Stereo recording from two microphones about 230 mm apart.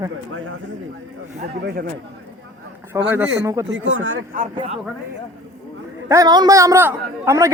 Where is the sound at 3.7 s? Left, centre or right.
Right.